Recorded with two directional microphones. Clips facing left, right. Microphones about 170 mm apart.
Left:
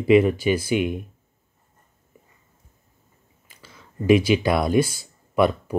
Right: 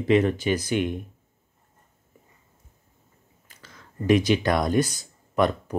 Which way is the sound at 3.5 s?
10° left (ahead or behind).